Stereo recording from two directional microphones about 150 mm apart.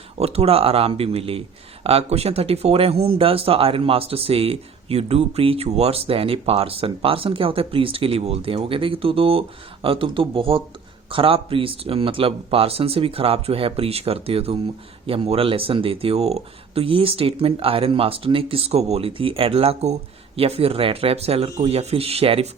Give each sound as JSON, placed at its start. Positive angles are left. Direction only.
{"t": 0.2, "sound": "a man's voice", "side_deg": -40}